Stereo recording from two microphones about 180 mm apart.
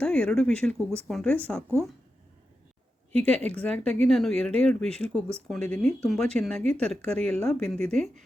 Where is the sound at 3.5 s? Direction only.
10° left (ahead or behind).